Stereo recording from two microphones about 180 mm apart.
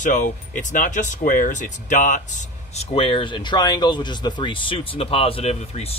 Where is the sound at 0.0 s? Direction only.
45° left (ahead or behind).